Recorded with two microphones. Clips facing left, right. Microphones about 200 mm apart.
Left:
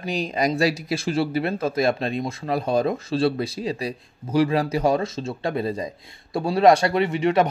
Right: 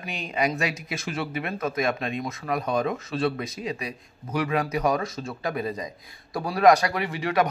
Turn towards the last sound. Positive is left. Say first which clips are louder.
# left 5 dB
turn(degrees=25)  # may be behind; listen again after turning